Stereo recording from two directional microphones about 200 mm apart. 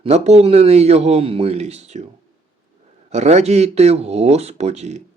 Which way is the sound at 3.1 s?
35° right (ahead or behind).